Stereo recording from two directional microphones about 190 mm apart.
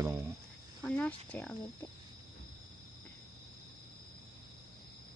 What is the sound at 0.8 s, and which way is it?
Speech, 5° left (ahead or behind).